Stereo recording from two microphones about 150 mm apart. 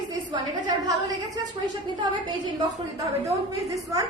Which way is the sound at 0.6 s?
25° right (ahead or behind).